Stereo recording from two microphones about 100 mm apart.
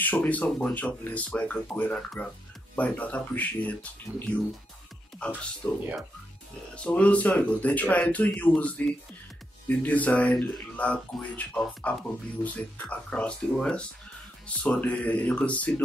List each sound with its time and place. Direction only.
0.0 s speech: 15° left (ahead or behind)
5.6 s speech: 20° left (ahead or behind)